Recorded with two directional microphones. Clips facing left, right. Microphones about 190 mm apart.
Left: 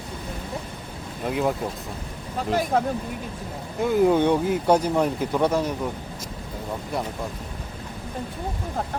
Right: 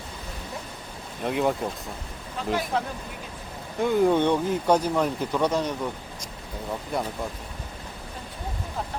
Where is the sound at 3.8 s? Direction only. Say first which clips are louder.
Left 2 dB; 5° left (ahead or behind).